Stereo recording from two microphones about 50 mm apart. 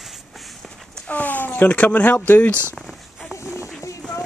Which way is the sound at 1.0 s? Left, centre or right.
Left.